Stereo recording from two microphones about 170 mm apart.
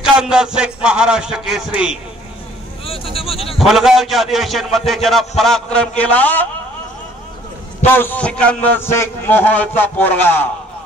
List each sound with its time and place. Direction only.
0.0 s music: 5° right (ahead or behind)
2.8 s a sound: 35° left (ahead or behind)
3.5 s music: centre (ahead or behind)
5.4 s a man's voice: 5° left (ahead or behind)
7.8 s a man's voice: 10° left (ahead or behind)